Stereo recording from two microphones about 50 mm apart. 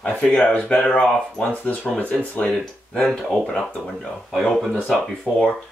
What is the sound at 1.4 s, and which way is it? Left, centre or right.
Speech, left.